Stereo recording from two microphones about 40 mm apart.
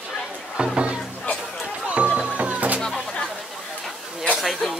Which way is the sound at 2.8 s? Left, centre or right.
Centre.